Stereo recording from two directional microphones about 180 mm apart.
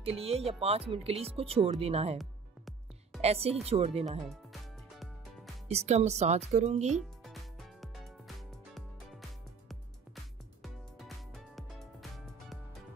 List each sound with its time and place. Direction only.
0.0 s speech: 35° right (ahead or behind)
2.1 s music: centre (ahead or behind)
3.2 s speech: 35° right (ahead or behind)
4.2 s music: centre (ahead or behind)
5.7 s speech: 35° right (ahead or behind)
6.9 s music: centre (ahead or behind)
10.6 s music: centre (ahead or behind)